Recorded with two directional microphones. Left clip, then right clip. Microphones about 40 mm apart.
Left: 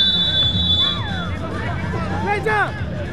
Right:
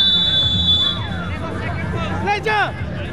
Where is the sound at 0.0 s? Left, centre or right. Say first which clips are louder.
Right 1 dB; centre.